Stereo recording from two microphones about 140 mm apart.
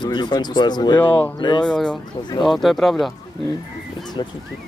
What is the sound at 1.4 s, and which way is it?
Speech, 35° left (ahead or behind).